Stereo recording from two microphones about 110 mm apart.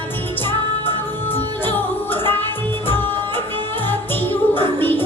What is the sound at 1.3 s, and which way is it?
Music, 20° left (ahead or behind).